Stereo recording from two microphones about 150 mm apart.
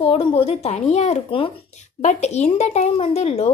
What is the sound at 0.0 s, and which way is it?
Speech, 40° left (ahead or behind).